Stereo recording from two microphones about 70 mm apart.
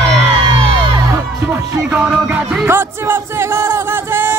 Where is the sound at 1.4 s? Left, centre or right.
Right.